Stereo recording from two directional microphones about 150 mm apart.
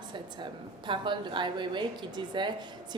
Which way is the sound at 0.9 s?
30° right (ahead or behind).